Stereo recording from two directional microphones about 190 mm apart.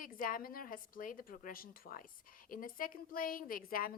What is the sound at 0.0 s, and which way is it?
A woman's voice, 45° left (ahead or behind).